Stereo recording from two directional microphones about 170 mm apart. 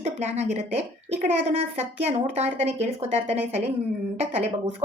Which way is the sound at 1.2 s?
40° right (ahead or behind).